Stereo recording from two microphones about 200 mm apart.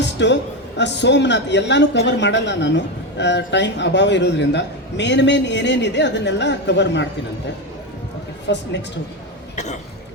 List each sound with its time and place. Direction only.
0.0 s a sound: 60° left (ahead or behind)
0.8 s speech: 60° left (ahead or behind)
8.5 s speech: 60° left (ahead or behind)